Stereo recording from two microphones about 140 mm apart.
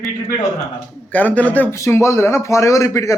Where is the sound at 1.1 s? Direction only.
10° left (ahead or behind).